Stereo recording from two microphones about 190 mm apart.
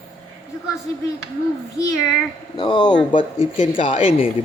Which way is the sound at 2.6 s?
25° left (ahead or behind).